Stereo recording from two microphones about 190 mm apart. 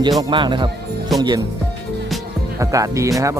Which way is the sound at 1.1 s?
Centre (ahead or behind).